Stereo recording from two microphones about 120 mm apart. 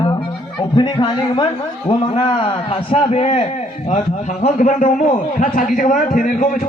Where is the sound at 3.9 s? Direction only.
85° left.